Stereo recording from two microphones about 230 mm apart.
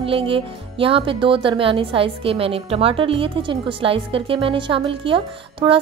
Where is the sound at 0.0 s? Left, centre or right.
Right.